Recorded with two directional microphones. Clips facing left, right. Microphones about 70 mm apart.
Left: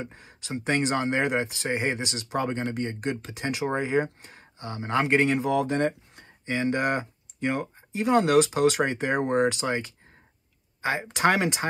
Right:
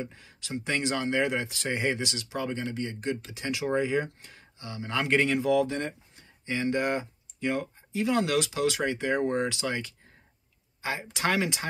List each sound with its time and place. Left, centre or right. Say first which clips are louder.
0.0 s speech: even; left
6.4 s speech: left 2 dB; left
9.6 s speech: left 3 dB; left